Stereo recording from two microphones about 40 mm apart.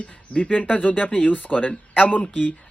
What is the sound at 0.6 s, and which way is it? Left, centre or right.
Speech, left.